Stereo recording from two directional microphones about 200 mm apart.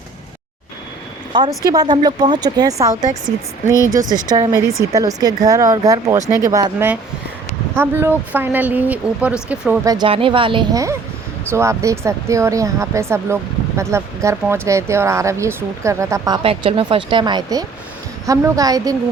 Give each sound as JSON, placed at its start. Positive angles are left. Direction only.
{"t": 1.3, "sound": "speech", "side_deg": -20}
{"t": 4.0, "sound": "speech", "side_deg": -20}
{"t": 9.8, "sound": "speech", "side_deg": -20}